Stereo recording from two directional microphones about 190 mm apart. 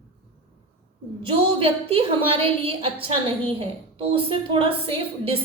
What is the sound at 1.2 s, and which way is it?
A woman's voice, 30° right (ahead or behind).